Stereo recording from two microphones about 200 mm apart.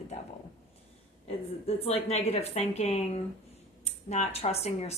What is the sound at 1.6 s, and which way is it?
Speech, 30° left (ahead or behind).